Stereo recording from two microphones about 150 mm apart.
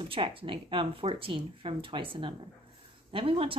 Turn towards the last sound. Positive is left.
turn(degrees=-35)  # may be behind; listen again after turning